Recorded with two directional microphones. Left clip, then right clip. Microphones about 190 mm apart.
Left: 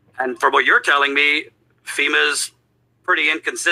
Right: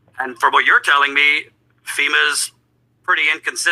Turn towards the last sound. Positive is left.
turn(degrees=-30)  # may be behind; listen again after turning